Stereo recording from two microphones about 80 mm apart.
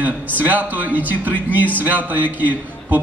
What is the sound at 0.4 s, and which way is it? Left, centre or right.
A man's voice, right.